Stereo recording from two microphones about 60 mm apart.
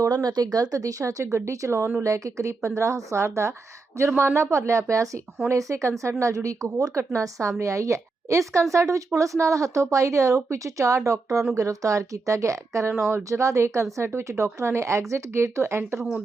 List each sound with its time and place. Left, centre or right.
0.0 s speech: right
1.5 s speech: right
2.0 s a woman's voice: right